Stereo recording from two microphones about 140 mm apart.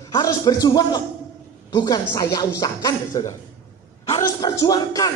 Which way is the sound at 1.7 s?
25° left (ahead or behind).